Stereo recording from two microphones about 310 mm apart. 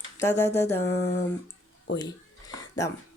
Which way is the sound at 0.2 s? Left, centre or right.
Centre.